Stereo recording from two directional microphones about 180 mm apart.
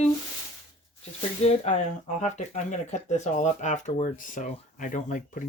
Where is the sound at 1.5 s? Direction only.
35° left (ahead or behind).